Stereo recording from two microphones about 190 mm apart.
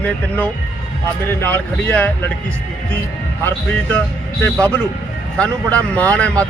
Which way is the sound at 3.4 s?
10° left (ahead or behind).